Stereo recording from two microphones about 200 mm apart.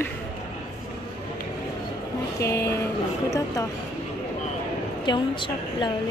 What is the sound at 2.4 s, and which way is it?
Speech, 15° left (ahead or behind).